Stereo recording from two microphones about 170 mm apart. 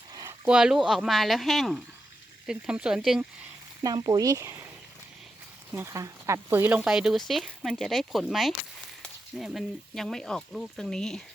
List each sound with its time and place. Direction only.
0.1 s a sound: 20° right (ahead or behind)
0.4 s speech: 5° right (ahead or behind)
3.8 s speech: 25° right (ahead or behind)
5.7 s speech: 15° right (ahead or behind); by 11.2 s 5° left (ahead or behind)